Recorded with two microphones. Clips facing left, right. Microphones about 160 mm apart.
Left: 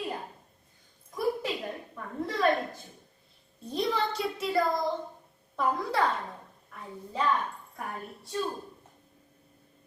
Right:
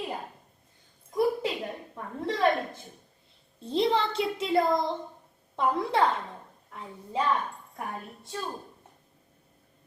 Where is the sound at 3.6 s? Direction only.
30° right (ahead or behind).